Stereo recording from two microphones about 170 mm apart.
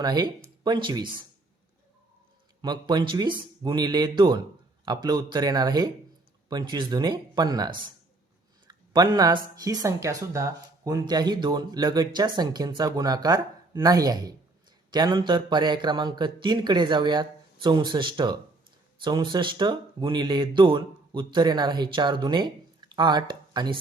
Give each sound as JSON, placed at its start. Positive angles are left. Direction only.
{"t": 0.0, "sound": "speech", "side_deg": -25}
{"t": 2.6, "sound": "speech", "side_deg": -25}